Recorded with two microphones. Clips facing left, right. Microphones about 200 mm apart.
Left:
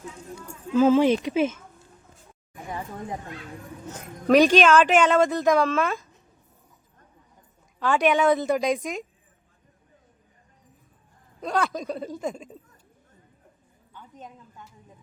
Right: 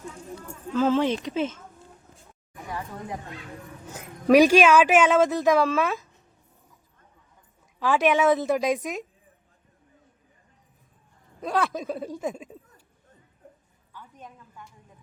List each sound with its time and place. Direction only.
0.7 s speech: 10° left (ahead or behind)
3.8 s speech: 10° right (ahead or behind)
7.8 s speech: 5° right (ahead or behind)
11.3 s speech: 5° right (ahead or behind)
13.9 s a sound: 20° left (ahead or behind)